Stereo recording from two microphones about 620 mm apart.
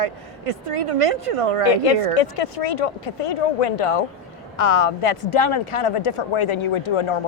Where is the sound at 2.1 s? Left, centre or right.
Left.